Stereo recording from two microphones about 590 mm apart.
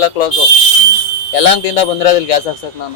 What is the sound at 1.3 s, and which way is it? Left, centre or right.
Speech, left.